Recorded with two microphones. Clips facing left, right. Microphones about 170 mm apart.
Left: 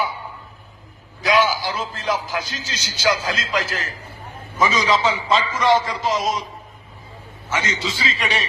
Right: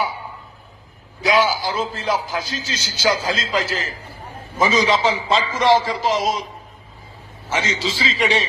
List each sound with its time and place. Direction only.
1.4 s a man's voice: 30° right (ahead or behind)
7.5 s a man's voice: 25° right (ahead or behind)